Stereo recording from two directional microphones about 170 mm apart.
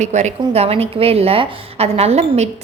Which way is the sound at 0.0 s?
45° right (ahead or behind).